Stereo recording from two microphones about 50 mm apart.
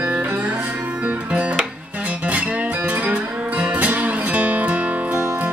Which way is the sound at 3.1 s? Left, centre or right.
Right.